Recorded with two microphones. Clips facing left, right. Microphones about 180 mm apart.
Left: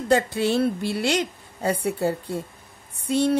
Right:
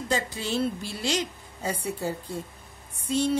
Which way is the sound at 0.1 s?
60° left (ahead or behind).